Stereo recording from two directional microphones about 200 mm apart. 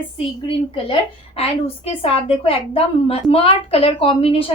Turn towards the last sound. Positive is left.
turn(degrees=30)  # may be behind; listen again after turning